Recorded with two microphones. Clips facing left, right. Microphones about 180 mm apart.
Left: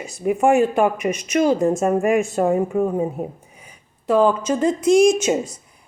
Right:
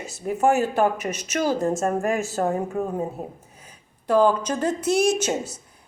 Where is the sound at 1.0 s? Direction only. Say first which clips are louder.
Left 7 dB; 10° left (ahead or behind).